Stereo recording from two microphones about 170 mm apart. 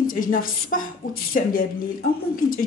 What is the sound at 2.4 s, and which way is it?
Speech, 55° left (ahead or behind).